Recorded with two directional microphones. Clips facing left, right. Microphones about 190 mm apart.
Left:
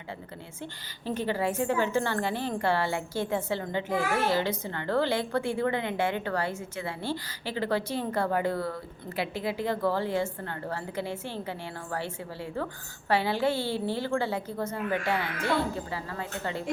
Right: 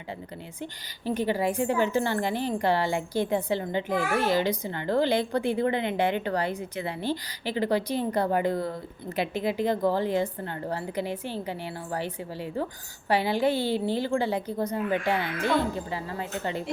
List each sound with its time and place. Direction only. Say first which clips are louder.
0.6 s a woman's voice: right 4 dB; 15° right (ahead or behind)